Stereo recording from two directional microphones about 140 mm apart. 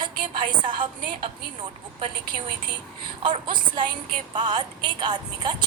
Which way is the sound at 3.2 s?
35° right (ahead or behind).